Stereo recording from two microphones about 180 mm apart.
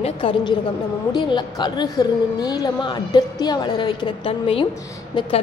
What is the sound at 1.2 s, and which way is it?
A woman's voice, 25° left (ahead or behind).